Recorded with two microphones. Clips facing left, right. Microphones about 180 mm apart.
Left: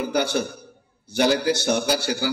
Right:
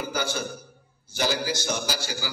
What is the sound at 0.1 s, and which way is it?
A man's voice, 65° left (ahead or behind).